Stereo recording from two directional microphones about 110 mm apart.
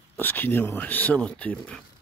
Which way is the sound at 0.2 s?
15° left (ahead or behind).